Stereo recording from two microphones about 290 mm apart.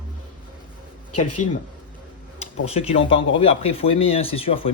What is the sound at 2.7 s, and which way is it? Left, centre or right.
Speech, left.